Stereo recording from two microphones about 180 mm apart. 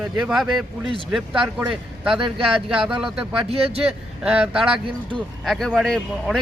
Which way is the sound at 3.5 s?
35° right (ahead or behind).